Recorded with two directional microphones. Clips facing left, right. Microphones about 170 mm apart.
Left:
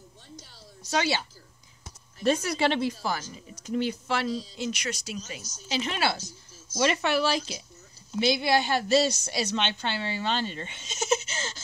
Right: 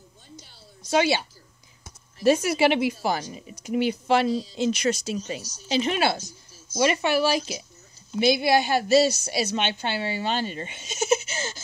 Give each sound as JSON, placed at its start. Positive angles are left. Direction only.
{"t": 0.9, "sound": "a woman's voice", "side_deg": -15}
{"t": 2.2, "sound": "a woman's voice", "side_deg": -10}
{"t": 4.6, "sound": "speech", "side_deg": -30}
{"t": 6.8, "sound": "a woman's voice", "side_deg": -10}